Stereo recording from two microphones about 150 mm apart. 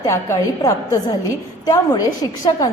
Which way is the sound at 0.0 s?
20° left (ahead or behind).